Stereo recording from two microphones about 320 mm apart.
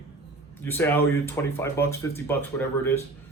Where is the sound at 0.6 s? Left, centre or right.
Centre.